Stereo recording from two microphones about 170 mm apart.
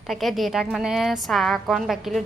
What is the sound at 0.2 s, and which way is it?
A woman's voice, centre (ahead or behind).